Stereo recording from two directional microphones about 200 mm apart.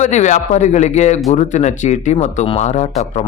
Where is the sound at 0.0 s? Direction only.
35° left (ahead or behind).